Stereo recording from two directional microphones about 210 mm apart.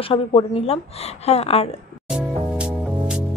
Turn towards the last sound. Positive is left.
turn(degrees=-5)  # may be behind; listen again after turning